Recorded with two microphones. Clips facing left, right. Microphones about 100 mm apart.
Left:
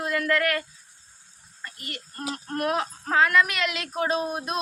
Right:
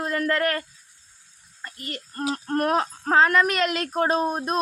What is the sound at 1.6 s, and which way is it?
Speech, 35° right (ahead or behind).